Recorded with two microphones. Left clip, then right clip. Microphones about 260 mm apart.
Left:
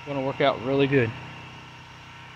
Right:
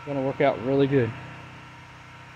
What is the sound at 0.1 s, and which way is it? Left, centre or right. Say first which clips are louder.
Speech: even; centre.